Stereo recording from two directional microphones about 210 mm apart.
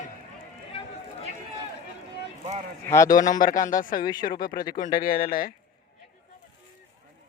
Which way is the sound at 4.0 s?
20° left (ahead or behind).